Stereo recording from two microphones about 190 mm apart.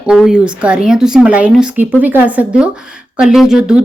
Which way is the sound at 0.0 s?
5° right (ahead or behind).